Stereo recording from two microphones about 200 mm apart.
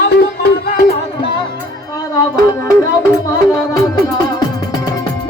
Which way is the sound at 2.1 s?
15° left (ahead or behind).